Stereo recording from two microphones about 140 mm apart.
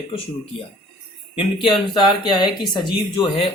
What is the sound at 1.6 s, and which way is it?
Speech, 35° left (ahead or behind).